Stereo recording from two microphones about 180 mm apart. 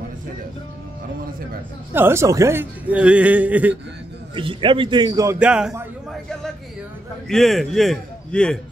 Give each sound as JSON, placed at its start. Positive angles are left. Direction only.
{"t": 2.0, "sound": "a man's voice", "side_deg": -15}
{"t": 4.4, "sound": "a man's voice", "side_deg": -30}
{"t": 5.4, "sound": "a man's voice", "side_deg": -5}